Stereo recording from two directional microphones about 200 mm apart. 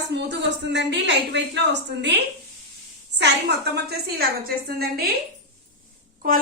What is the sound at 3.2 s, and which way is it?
A woman's voice, 55° right (ahead or behind).